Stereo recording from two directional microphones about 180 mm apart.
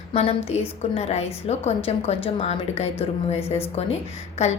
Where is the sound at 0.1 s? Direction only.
35° left (ahead or behind).